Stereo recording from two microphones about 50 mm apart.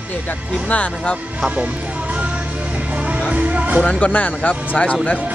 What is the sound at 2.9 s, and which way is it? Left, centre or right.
Music, right.